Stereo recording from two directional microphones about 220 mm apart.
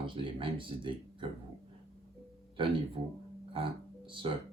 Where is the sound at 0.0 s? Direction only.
25° right (ahead or behind).